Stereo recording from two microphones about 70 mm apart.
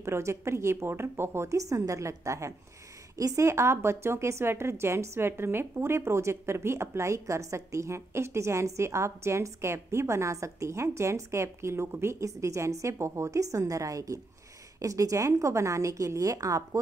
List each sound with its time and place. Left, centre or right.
0.0 s a woman's voice: right